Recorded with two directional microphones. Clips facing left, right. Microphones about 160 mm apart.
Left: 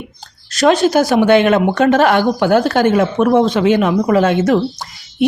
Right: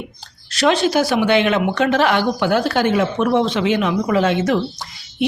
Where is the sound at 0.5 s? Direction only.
45° left (ahead or behind).